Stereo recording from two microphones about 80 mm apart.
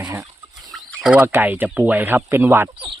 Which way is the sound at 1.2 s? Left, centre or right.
Right.